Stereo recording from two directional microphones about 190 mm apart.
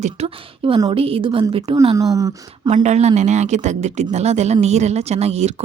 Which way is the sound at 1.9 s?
20° right (ahead or behind).